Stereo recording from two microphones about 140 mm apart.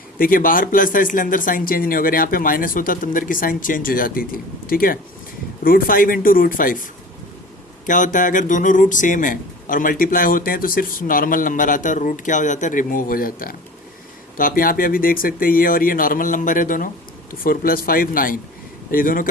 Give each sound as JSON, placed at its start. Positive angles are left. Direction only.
{"t": 0.2, "sound": "speech", "side_deg": 85}
{"t": 7.9, "sound": "speech", "side_deg": 65}
{"t": 17.4, "sound": "speech", "side_deg": 90}